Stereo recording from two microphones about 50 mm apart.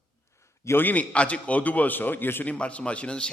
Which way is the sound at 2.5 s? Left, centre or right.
Left.